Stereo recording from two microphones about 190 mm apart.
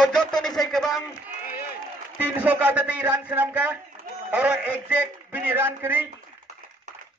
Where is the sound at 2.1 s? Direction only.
10° right (ahead or behind).